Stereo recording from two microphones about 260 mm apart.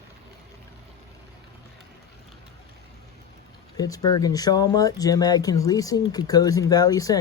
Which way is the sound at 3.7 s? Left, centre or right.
Centre.